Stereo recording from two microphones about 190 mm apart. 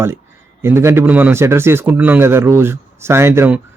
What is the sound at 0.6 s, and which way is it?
A man's voice, 15° right (ahead or behind).